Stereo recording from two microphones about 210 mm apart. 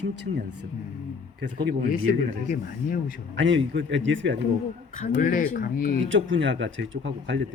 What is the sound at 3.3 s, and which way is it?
Speech, 60° right (ahead or behind).